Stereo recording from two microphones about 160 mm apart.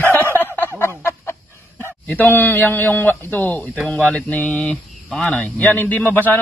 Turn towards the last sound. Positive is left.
turn(degrees=10)  # may be behind; listen again after turning